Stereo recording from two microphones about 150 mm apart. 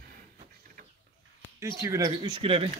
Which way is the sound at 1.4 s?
20° right (ahead or behind).